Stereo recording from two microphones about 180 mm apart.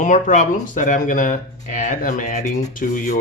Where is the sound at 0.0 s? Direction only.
45° left (ahead or behind).